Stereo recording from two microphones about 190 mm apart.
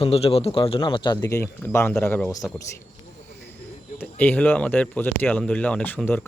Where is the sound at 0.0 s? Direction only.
30° left (ahead or behind); by 2.3 s 10° left (ahead or behind).